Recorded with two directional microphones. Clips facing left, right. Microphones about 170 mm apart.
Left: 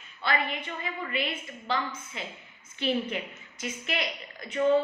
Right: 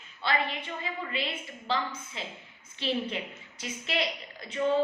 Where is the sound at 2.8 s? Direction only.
25° right (ahead or behind).